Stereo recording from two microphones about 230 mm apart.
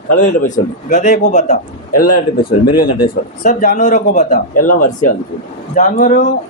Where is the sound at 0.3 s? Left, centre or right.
Left.